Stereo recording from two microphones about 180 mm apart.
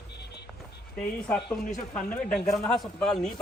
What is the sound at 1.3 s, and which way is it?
Speech, centre (ahead or behind).